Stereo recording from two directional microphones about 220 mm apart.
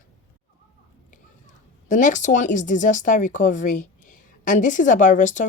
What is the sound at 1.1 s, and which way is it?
Speech, 35° left (ahead or behind).